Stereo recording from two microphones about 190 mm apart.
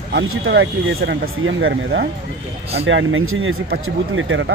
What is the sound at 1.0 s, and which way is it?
Speech, 60° right (ahead or behind).